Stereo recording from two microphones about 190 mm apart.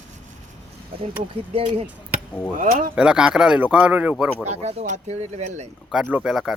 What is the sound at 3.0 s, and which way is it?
Speech, 5° right (ahead or behind).